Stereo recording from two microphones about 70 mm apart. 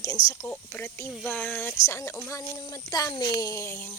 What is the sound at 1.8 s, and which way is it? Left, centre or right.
Speech, left.